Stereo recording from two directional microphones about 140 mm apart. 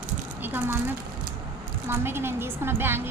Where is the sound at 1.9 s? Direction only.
15° right (ahead or behind).